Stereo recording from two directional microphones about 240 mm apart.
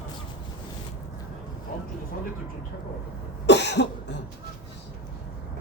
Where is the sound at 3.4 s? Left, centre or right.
Left.